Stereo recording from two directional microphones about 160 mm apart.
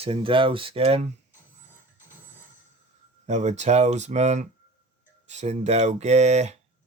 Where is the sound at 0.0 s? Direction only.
35° right (ahead or behind).